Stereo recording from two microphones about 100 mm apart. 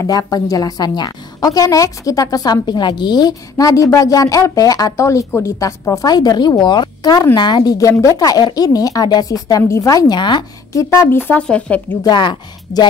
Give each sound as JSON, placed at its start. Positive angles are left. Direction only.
{"t": 0.0, "sound": "a woman's voice", "side_deg": 35}
{"t": 6.0, "sound": "a woman's voice", "side_deg": 45}
{"t": 10.7, "sound": "a woman's voice", "side_deg": 30}
{"t": 12.0, "sound": "speech", "side_deg": 45}